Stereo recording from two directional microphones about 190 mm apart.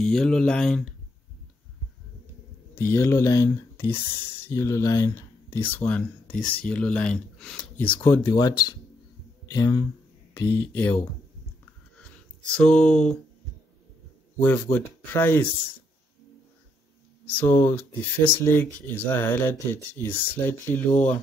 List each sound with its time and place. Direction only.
0.0 s speech: 5° left (ahead or behind)
2.7 s speech: 10° left (ahead or behind)
12.5 s speech: 5° left (ahead or behind)
14.4 s speech: 10° left (ahead or behind)
17.4 s speech: 10° left (ahead or behind)